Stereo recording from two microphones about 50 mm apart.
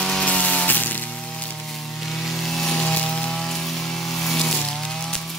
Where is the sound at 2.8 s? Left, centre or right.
Left.